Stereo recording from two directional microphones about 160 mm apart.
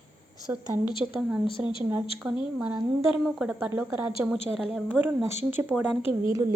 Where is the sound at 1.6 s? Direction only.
10° right (ahead or behind).